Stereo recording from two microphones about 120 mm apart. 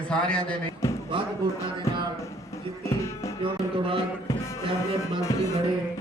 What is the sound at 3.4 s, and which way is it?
Music, 50° right (ahead or behind).